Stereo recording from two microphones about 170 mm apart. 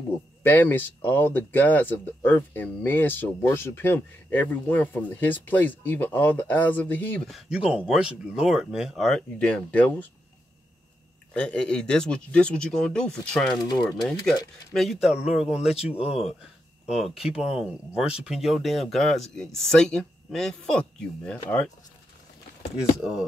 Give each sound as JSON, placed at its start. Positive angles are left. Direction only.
{"t": 0.4, "sound": "speech", "side_deg": 10}
{"t": 11.3, "sound": "speech", "side_deg": 5}
{"t": 13.7, "sound": "speech", "side_deg": 25}
{"t": 14.7, "sound": "speech", "side_deg": 0}
{"t": 22.9, "sound": "speech", "side_deg": 0}